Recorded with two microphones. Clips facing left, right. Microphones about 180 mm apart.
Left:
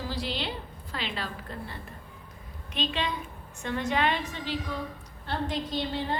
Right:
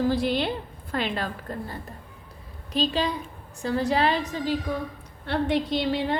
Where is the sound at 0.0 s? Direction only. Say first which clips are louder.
Right 10 dB; 50° right (ahead or behind).